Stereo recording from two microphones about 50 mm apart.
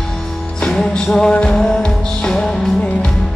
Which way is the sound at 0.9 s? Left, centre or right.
Centre.